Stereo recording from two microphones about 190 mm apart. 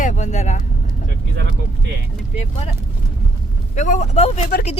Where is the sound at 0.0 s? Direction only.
40° left (ahead or behind).